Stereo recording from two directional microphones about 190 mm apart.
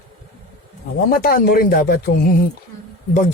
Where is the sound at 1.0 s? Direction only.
50° left (ahead or behind).